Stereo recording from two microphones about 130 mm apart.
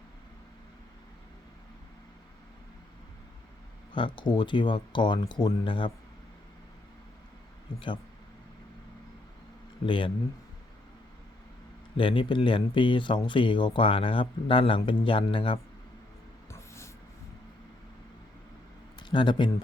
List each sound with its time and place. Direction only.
3.9 s speech: 40° left (ahead or behind)
9.8 s speech: 40° left (ahead or behind)
11.9 s speech: 40° left (ahead or behind)
16.5 s a sound: 20° left (ahead or behind)
18.9 s speech: 35° left (ahead or behind)